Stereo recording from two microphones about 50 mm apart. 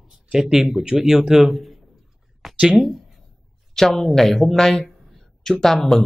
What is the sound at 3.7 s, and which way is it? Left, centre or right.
A man's voice, centre.